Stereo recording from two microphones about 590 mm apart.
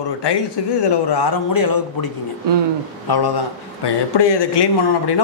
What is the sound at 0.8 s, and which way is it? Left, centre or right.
Speech, left.